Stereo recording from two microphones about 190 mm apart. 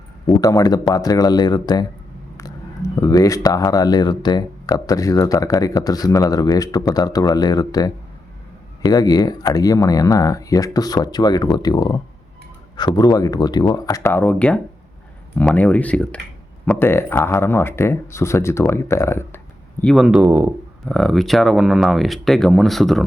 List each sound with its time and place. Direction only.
0.3 s speech: 20° left (ahead or behind)
2.9 s speech: 20° left (ahead or behind)
19.8 s speech: centre (ahead or behind)
20.8 s speech: centre (ahead or behind)